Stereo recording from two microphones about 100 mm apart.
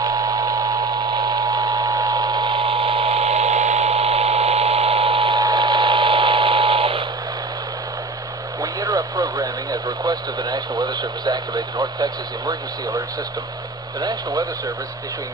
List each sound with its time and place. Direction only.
0.0 s a sound: 40° right (ahead or behind); by 5.4 s 60° right (ahead or behind)
5.4 s radio: 45° right (ahead or behind); by 7.0 s 65° right (ahead or behind)
8.6 s radio: 35° right (ahead or behind)
14.0 s speech: 40° right (ahead or behind)